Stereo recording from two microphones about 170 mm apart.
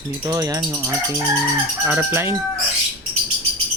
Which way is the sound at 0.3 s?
20° right (ahead or behind).